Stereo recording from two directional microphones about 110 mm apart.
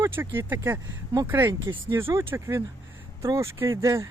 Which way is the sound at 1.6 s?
45° right (ahead or behind).